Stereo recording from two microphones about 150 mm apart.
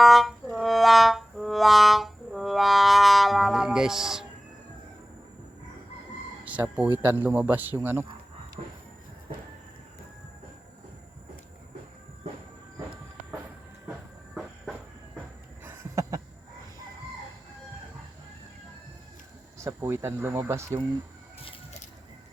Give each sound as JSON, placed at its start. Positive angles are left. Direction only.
{"t": 0.0, "sound": "music", "side_deg": 0}
{"t": 6.4, "sound": "speech", "side_deg": -10}
{"t": 14.3, "sound": "train", "side_deg": 0}
{"t": 15.6, "sound": "a sound", "side_deg": -20}
{"t": 19.6, "sound": "speech", "side_deg": -15}